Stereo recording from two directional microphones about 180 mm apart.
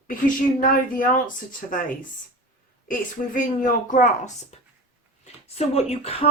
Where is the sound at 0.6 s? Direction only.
50° left (ahead or behind).